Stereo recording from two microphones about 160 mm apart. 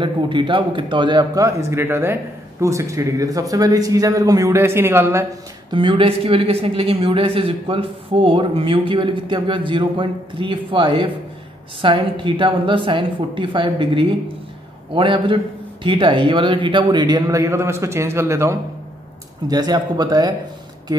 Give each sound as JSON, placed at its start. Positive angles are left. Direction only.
{"t": 0.0, "sound": "a man's voice", "side_deg": -30}
{"t": 5.7, "sound": "a man's voice", "side_deg": -30}